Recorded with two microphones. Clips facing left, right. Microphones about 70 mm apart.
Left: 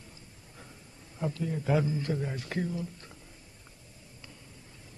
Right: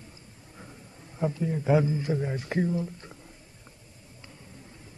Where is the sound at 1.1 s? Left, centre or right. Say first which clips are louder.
Right 4 dB; right.